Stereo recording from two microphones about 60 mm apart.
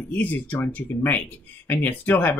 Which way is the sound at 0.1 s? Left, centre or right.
Left.